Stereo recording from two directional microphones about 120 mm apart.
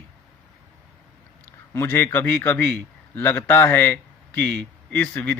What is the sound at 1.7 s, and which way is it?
A man's voice, 20° left (ahead or behind).